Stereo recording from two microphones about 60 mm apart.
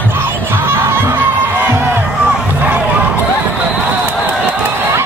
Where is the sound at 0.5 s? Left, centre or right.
Right.